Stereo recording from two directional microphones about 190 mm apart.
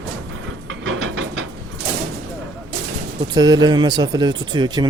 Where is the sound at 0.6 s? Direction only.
90° right.